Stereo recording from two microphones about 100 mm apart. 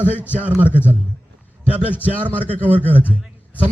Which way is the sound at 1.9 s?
20° left (ahead or behind).